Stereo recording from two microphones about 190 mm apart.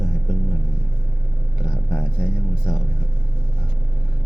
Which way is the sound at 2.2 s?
5° right (ahead or behind).